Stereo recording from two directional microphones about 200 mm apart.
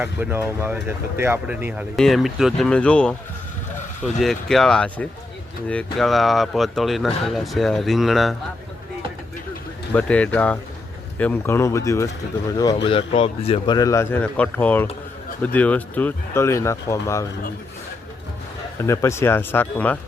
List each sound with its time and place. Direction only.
0.0 s speech: 10° right (ahead or behind); by 3.2 s 5° left (ahead or behind)
4.2 s speech: centre (ahead or behind)
9.9 s speech: 5° left (ahead or behind)
12.7 s speech: 25° left (ahead or behind)
13.7 s speech: 15° left (ahead or behind)
18.9 s speech: 15° left (ahead or behind)